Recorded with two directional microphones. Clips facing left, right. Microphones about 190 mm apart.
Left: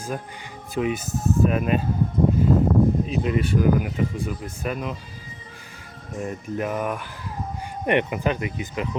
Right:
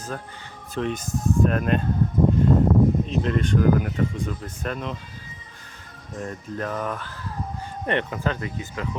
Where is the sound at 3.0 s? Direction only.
5° left (ahead or behind).